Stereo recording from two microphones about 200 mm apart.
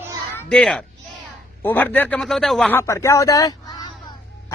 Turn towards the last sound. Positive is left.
turn(degrees=20)  # may be behind; listen again after turning